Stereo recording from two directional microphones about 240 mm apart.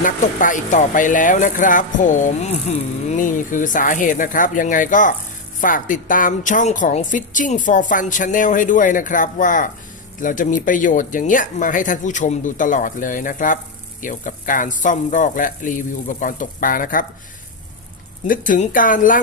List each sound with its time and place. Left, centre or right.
0.0 s speech: left
18.3 s speech: left